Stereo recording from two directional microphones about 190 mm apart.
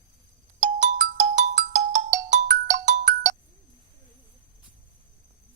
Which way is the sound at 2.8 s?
40° right (ahead or behind).